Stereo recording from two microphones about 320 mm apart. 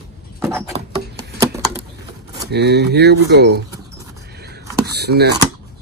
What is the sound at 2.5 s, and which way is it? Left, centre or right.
Speech, right.